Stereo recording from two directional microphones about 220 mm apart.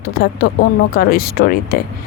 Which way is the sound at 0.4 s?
50° left (ahead or behind).